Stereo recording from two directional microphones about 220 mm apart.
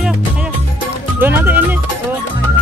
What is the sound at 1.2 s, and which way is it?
Music, 10° right (ahead or behind).